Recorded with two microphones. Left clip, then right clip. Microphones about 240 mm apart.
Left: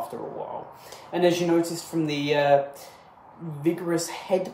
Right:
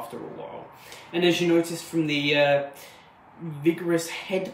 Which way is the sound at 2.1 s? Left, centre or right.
Centre.